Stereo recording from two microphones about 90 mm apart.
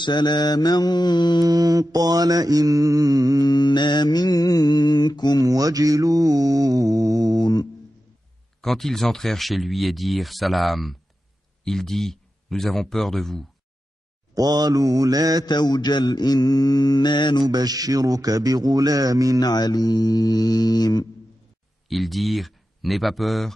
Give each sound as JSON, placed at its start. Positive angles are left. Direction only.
{"t": 0.0, "sound": "mantra", "side_deg": 55}
{"t": 1.4, "sound": "mantra", "side_deg": -45}
{"t": 3.4, "sound": "mantra", "side_deg": 55}
{"t": 5.4, "sound": "mantra", "side_deg": -40}
{"t": 8.5, "sound": "speech", "side_deg": 5}
{"t": 14.3, "sound": "mantra", "side_deg": -50}
{"t": 15.4, "sound": "mantra", "side_deg": 50}
{"t": 17.4, "sound": "mantra", "side_deg": -50}
{"t": 19.4, "sound": "mantra", "side_deg": 50}
{"t": 21.8, "sound": "speech", "side_deg": 0}